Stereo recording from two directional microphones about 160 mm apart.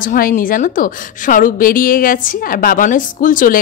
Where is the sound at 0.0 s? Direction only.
60° left (ahead or behind).